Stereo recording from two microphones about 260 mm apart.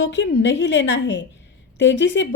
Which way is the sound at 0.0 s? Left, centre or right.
Left.